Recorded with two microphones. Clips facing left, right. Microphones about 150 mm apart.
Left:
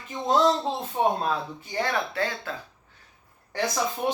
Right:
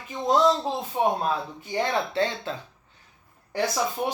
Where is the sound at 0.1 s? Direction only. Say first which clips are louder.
Right 1 dB; 5° right (ahead or behind).